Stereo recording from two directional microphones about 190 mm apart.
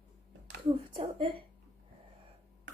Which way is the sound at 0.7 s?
30° right (ahead or behind).